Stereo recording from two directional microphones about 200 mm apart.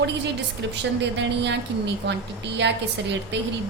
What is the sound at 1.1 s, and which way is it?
Speech, 60° right (ahead or behind).